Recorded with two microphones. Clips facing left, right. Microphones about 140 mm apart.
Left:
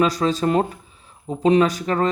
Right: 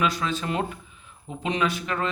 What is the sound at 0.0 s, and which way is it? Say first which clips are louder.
Speech: left 7 dB; 35° left (ahead or behind).